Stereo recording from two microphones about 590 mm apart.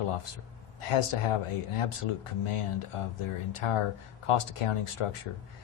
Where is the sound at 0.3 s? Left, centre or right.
Left.